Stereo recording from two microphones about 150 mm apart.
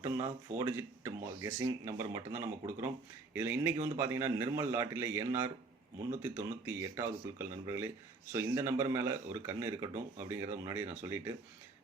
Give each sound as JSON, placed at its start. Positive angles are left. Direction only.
{"t": 0.0, "sound": "speech", "side_deg": -50}
{"t": 0.6, "sound": "speech", "side_deg": -15}
{"t": 6.7, "sound": "speech", "side_deg": -15}